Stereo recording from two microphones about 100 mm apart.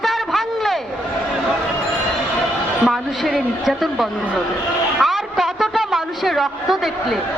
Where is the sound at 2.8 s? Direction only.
Centre (ahead or behind).